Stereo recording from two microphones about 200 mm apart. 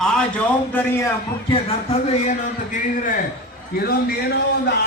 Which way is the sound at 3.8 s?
55° left (ahead or behind).